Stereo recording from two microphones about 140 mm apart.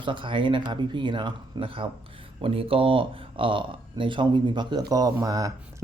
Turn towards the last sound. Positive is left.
turn(degrees=-25)  # may be behind; listen again after turning